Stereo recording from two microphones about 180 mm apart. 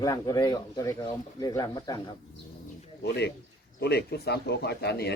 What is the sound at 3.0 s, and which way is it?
Speech, 65° left (ahead or behind).